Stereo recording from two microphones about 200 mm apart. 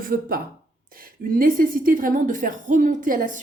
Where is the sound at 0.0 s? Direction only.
45° right (ahead or behind).